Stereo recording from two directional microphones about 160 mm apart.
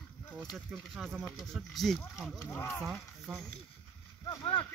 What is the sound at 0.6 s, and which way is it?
Speech, centre (ahead or behind).